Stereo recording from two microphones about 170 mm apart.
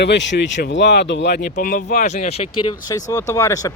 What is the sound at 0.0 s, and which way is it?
Speech, 90° left.